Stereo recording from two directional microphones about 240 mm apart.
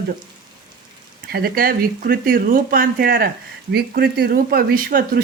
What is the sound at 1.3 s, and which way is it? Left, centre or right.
Speech, right.